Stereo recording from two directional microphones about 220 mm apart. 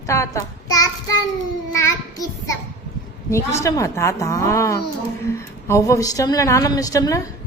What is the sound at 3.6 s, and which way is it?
A woman's voice, 15° left (ahead or behind).